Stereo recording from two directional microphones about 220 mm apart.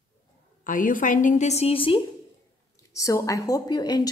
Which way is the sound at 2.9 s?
15° left (ahead or behind).